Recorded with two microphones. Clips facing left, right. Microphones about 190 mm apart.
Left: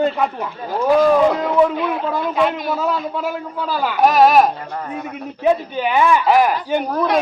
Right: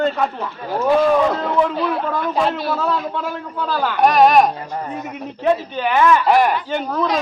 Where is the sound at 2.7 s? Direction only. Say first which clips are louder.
Even; 5° left (ahead or behind).